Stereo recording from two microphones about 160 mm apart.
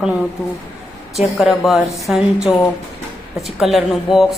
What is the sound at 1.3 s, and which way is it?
A man's voice, centre (ahead or behind).